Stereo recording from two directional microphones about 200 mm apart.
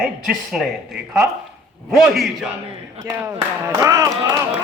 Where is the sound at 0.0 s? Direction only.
Centre (ahead or behind).